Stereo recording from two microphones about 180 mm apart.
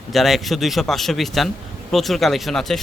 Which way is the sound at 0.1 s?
Centre (ahead or behind).